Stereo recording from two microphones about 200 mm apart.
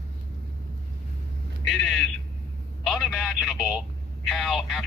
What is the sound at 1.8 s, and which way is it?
Speech, centre (ahead or behind).